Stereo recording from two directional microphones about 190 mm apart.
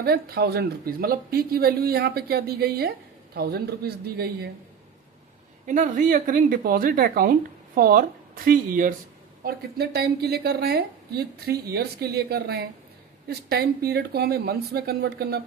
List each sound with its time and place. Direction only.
0.0 s speech: 55° right (ahead or behind)
5.6 s speech: 40° right (ahead or behind); by 15.4 s 55° right (ahead or behind)